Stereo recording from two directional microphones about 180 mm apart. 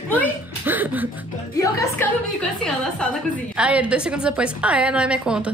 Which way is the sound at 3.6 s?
5° right (ahead or behind).